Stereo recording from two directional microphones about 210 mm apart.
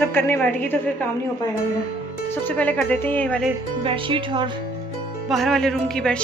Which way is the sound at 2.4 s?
5° left (ahead or behind).